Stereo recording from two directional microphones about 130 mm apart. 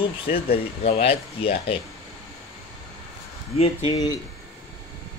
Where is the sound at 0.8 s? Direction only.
45° left (ahead or behind).